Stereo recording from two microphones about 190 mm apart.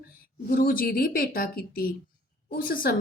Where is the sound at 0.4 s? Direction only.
50° left (ahead or behind).